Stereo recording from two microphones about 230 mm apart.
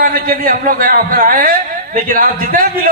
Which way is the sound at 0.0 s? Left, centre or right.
Right.